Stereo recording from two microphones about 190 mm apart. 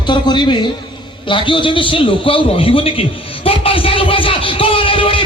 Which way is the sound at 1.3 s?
25° left (ahead or behind).